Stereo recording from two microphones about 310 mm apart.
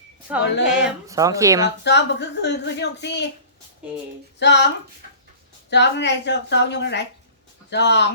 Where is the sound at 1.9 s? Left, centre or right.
Left.